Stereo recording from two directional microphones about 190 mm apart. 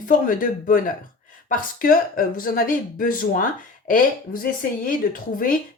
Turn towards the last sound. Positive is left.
turn(degrees=45)  # may be behind; listen again after turning